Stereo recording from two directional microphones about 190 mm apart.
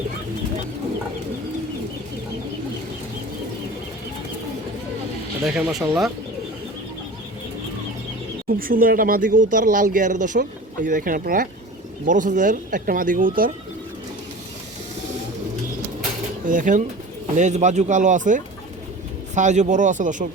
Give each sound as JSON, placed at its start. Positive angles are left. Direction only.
{"t": 5.5, "sound": "speech", "side_deg": -5}
{"t": 8.4, "sound": "speech", "side_deg": -50}
{"t": 16.5, "sound": "speech", "side_deg": -45}